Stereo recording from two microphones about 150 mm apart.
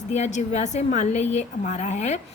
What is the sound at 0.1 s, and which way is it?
A woman's voice, 50° left (ahead or behind).